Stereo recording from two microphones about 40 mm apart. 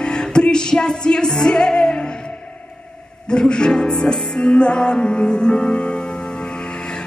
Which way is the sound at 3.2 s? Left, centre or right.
Left.